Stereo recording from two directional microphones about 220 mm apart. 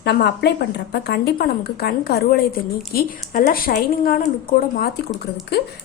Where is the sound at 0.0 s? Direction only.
50° left (ahead or behind).